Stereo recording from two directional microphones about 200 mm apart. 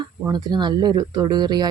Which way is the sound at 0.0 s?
20° right (ahead or behind).